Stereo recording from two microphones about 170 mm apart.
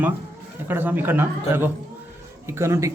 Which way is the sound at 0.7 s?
10° right (ahead or behind).